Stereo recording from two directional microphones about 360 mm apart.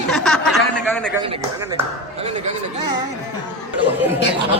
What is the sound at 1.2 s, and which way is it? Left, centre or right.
Speech, centre.